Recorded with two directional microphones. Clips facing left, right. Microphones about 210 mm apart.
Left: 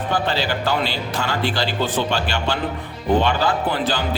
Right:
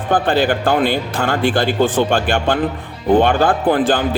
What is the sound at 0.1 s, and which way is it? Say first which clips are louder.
Speech: right 8 dB; 50° right (ahead or behind).